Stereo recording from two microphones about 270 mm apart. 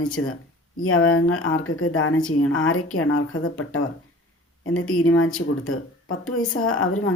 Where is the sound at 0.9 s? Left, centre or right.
Left.